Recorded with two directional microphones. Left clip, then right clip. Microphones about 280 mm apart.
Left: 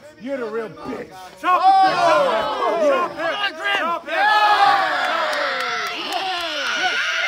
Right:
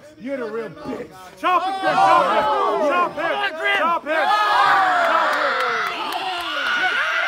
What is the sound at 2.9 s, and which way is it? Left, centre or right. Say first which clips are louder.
Battle cry: even; right.